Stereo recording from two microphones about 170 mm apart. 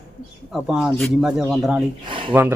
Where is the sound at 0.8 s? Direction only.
Centre (ahead or behind).